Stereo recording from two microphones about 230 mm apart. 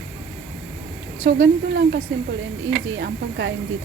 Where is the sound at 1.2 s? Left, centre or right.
Right.